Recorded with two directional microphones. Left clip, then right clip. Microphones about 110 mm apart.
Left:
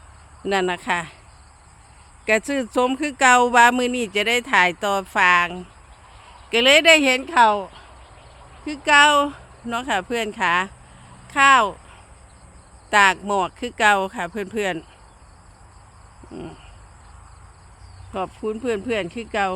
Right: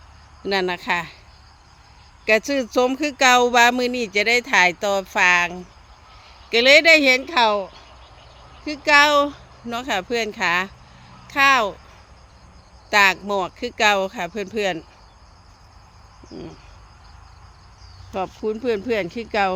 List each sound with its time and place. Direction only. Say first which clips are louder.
0.4 s speech: even; 10° left (ahead or behind)
2.2 s speech: right 2 dB; centre (ahead or behind)
12.9 s speech: even; 15° left (ahead or behind)
18.1 s speech: right 1 dB; 10° right (ahead or behind)
19.3 s speech: right 2 dB; 35° right (ahead or behind)